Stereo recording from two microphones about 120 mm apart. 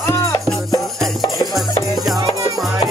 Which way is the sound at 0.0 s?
25° left (ahead or behind).